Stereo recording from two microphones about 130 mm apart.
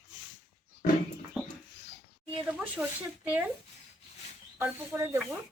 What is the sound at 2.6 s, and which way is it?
Speech, 10° right (ahead or behind).